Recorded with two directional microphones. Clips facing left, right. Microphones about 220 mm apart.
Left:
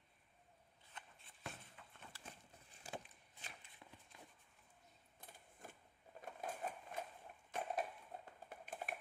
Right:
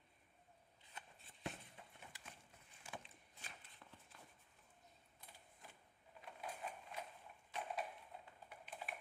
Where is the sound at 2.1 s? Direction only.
15° right (ahead or behind).